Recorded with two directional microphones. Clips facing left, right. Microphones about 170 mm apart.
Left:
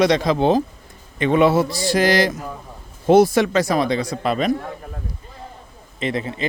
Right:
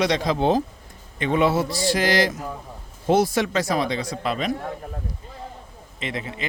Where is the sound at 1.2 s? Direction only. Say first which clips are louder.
Left 5 dB; 70° left (ahead or behind).